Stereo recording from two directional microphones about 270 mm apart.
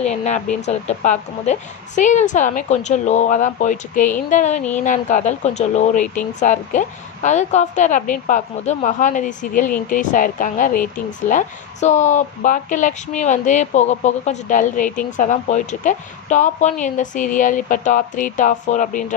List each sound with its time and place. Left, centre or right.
0.0 s speech: left